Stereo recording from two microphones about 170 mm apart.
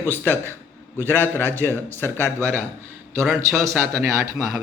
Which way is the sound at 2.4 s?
15° right (ahead or behind).